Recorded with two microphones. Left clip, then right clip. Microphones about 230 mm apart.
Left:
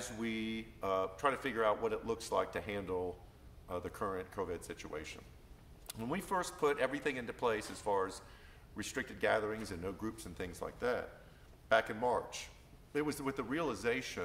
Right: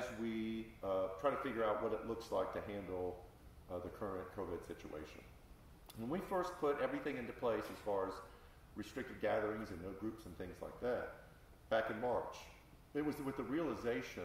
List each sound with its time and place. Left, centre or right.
0.2 s a man's voice: left
4.0 s a man's voice: left